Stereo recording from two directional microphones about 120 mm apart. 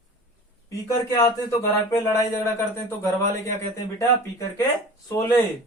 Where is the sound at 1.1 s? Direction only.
30° left (ahead or behind).